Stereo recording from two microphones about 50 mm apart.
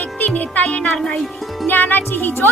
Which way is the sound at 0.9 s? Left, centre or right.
Centre.